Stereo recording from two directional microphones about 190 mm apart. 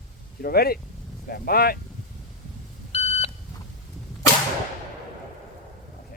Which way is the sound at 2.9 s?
35° left (ahead or behind).